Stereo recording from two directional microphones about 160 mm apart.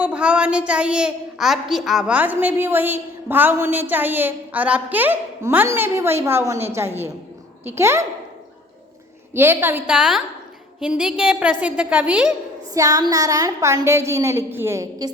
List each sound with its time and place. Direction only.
0.0 s a woman's voice: 5° right (ahead or behind)
9.3 s a woman's voice: 15° right (ahead or behind)
12.7 s a woman's voice: 20° right (ahead or behind)